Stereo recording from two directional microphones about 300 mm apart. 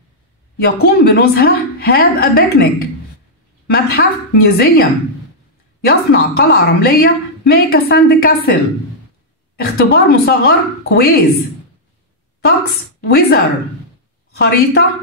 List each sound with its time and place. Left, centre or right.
0.6 s a woman's voice: left
5.9 s a woman's voice: left
9.8 s a woman's voice: left
12.4 s a woman's voice: left
14.4 s a woman's voice: left